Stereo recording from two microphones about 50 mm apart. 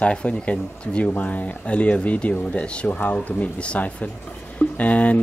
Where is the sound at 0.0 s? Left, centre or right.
Left.